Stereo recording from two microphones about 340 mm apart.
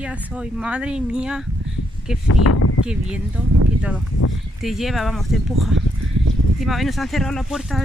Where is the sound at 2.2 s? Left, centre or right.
Left.